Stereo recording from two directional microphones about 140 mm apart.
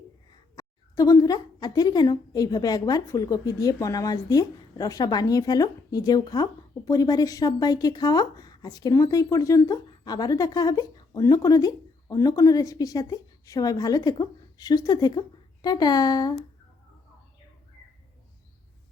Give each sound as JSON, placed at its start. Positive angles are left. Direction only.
{"t": 0.3, "sound": "a woman's voice", "side_deg": 25}